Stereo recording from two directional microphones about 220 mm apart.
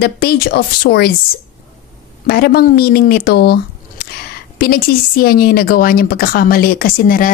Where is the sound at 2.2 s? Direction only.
45° left (ahead or behind).